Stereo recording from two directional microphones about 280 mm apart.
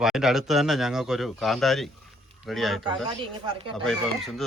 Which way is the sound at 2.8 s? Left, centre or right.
Centre.